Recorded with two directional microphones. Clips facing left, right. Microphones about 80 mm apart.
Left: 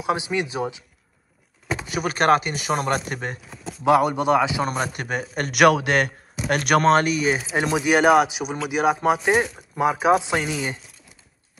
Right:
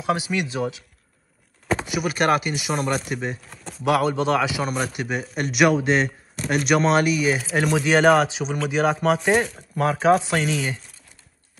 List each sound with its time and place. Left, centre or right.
0.0 s a man's voice: left
1.9 s speech: left
3.4 s speech: centre
3.8 s a man's voice: left
4.9 s a man's voice: left
7.0 s speech: left
7.6 s speech: centre